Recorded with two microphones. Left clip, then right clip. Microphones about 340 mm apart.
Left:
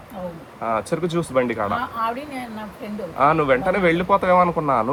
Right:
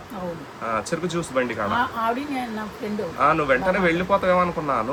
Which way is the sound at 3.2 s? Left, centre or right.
Centre.